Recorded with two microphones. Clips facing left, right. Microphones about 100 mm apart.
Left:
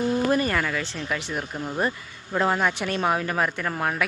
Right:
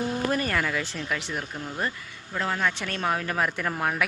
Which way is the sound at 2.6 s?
15° left (ahead or behind).